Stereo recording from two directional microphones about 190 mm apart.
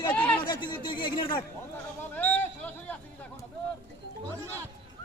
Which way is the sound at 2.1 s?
10° left (ahead or behind).